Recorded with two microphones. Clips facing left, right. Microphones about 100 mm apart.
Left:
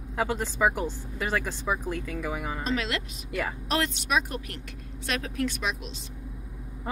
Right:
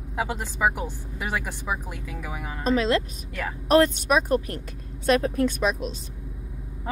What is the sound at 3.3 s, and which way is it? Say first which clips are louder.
Speech: left 1 dB; 5° left (ahead or behind).